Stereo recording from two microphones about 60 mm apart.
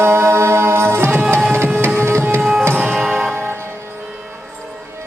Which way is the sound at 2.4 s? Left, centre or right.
Centre.